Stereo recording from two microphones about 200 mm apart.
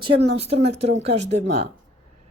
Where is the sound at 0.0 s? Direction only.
30° right (ahead or behind).